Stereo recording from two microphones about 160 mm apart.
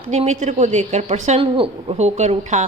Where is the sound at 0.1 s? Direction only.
45° right (ahead or behind).